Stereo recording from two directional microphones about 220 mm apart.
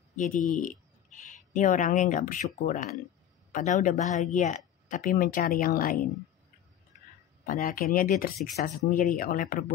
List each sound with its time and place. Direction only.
0.1 s speech: 35° left (ahead or behind)
7.4 s speech: 40° left (ahead or behind)